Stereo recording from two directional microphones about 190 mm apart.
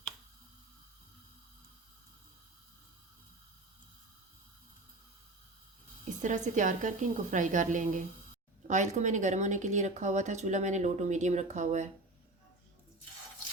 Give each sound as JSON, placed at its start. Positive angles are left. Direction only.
{"t": 6.2, "sound": "speech", "side_deg": -40}